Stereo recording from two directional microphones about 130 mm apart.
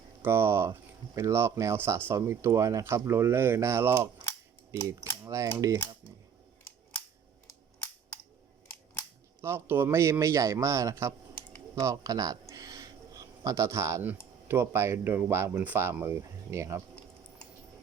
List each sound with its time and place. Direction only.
0.2 s speech: 20° right (ahead or behind)
9.4 s speech: 20° right (ahead or behind)
11.7 s a sound: 25° right (ahead or behind)
14.4 s speech: 20° right (ahead or behind)